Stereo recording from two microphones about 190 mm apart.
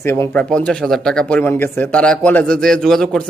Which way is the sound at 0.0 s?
15° left (ahead or behind).